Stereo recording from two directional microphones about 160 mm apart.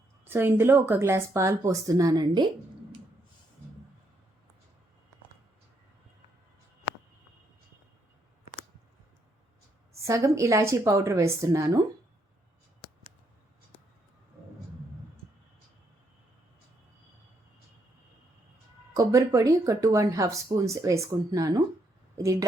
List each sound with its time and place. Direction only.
0.3 s speech: 15° right (ahead or behind)
10.0 s speech: 20° right (ahead or behind)
18.9 s speech: 20° right (ahead or behind)